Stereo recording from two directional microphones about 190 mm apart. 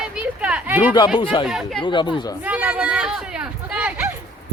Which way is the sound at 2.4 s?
5° right (ahead or behind).